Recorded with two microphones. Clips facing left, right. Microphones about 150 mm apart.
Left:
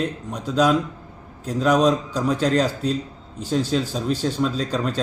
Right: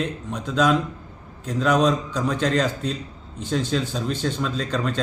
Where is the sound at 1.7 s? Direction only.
35° left (ahead or behind).